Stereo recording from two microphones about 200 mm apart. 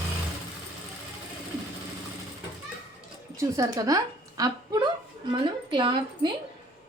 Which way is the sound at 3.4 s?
15° right (ahead or behind).